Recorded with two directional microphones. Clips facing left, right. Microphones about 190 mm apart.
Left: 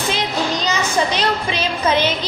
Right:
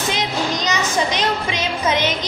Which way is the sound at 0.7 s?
15° right (ahead or behind).